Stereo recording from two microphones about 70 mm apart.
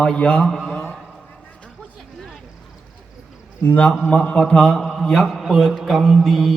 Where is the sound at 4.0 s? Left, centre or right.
Centre.